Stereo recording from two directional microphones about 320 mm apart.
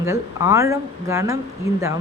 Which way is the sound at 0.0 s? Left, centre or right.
Centre.